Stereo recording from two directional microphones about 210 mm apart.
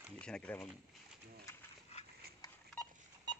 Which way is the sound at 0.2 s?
5° left (ahead or behind).